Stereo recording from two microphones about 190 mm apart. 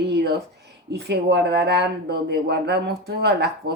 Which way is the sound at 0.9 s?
60° right (ahead or behind).